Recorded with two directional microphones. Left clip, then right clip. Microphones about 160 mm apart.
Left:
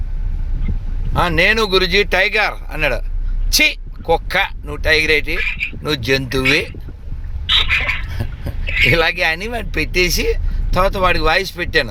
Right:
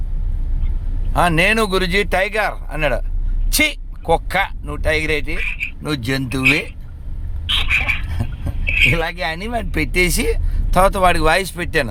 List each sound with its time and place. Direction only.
1.1 s speech: 5° right (ahead or behind)
7.5 s bird: 5° right (ahead or behind)
8.9 s speech: 10° left (ahead or behind); by 11.9 s 10° right (ahead or behind)